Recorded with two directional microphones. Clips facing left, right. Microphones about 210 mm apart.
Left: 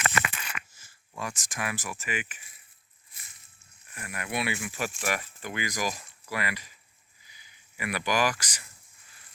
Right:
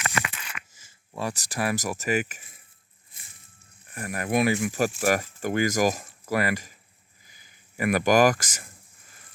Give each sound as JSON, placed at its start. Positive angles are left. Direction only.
{"t": 0.0, "sound": "a sound", "side_deg": 50}
{"t": 1.1, "sound": "speech", "side_deg": -35}
{"t": 3.9, "sound": "speech", "side_deg": -40}